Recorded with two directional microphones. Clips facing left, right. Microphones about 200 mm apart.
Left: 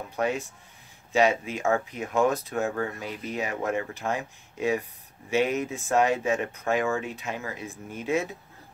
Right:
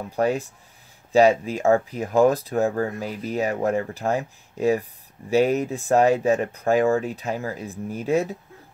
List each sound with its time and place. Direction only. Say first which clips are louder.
0.1 s speech: right 5 dB; 35° right (ahead or behind)